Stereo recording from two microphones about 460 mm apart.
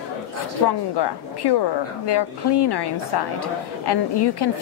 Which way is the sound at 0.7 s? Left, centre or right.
Left.